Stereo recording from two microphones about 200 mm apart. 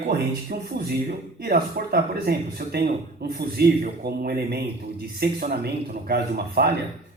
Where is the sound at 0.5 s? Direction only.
45° right (ahead or behind).